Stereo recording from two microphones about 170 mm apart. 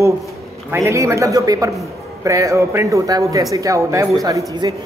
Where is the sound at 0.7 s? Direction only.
15° right (ahead or behind).